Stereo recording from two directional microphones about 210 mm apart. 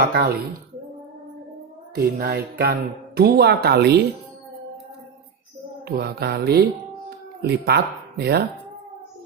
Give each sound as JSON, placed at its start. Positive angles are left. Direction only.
{"t": 0.0, "sound": "speech", "side_deg": -45}
{"t": 2.0, "sound": "speech", "side_deg": -45}
{"t": 5.8, "sound": "speech", "side_deg": -50}